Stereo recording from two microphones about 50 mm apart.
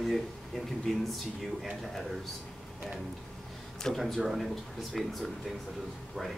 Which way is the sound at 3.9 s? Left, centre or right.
Centre.